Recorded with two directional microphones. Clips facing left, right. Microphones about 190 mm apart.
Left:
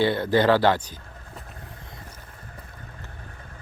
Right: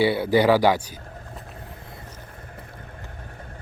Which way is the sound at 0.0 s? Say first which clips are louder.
Right 2 dB; 10° right (ahead or behind).